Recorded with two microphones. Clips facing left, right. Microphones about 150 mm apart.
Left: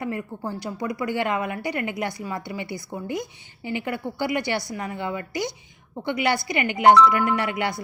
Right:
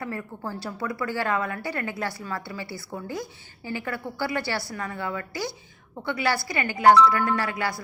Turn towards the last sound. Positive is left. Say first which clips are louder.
# left 2 dB
turn(degrees=20)  # may be behind; listen again after turning